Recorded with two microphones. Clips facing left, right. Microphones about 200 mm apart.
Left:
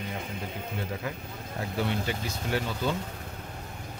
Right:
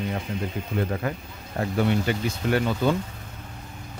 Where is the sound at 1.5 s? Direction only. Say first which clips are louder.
Right 7 dB; 60° right (ahead or behind).